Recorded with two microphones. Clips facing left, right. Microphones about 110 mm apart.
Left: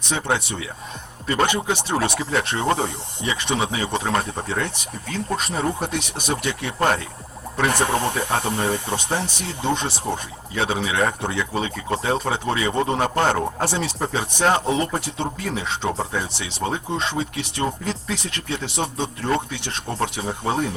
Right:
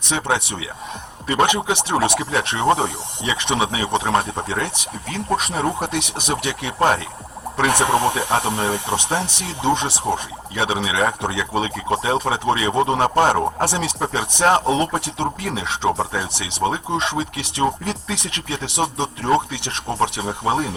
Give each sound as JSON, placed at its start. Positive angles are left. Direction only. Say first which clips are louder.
{"t": 1.3, "sound": "speech", "louder": "right 3 dB", "side_deg": -10}
{"t": 18.9, "sound": "speech", "louder": "right 4 dB", "side_deg": -20}